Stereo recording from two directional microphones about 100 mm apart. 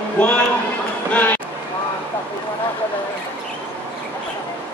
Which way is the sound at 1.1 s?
15° left (ahead or behind).